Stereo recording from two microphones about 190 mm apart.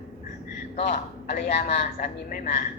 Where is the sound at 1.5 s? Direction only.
40° left (ahead or behind).